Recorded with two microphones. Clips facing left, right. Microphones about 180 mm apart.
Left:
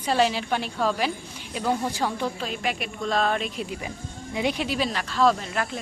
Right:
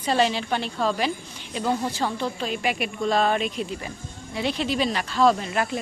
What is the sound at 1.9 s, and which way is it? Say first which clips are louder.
Speech: even; 10° left (ahead or behind).